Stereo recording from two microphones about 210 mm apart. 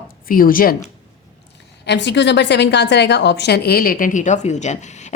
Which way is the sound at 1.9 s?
55° left (ahead or behind).